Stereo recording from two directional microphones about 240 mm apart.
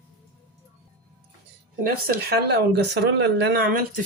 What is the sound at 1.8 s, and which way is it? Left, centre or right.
Speech, right.